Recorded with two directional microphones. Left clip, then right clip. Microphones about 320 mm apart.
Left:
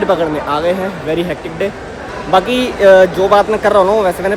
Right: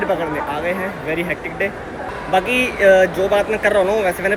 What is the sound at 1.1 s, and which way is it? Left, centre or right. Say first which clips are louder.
Speech: left 4 dB; centre.